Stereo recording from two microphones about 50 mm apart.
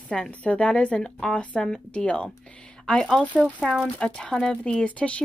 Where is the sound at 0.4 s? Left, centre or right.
Left.